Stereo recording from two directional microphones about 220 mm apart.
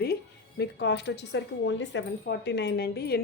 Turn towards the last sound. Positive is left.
turn(degrees=45)  # may be behind; listen again after turning